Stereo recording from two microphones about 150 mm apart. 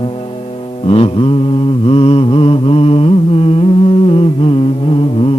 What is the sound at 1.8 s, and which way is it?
Mantra, 40° left (ahead or behind).